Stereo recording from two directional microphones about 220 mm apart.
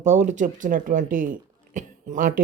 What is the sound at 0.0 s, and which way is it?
Speech, 30° right (ahead or behind).